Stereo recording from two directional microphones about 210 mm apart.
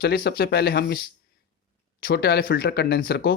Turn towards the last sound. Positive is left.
turn(degrees=50)  # may be behind; listen again after turning